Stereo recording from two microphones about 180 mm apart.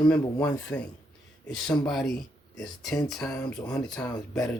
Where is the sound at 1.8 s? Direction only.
Centre (ahead or behind).